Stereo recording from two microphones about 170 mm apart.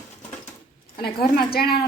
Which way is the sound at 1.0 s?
65° left (ahead or behind).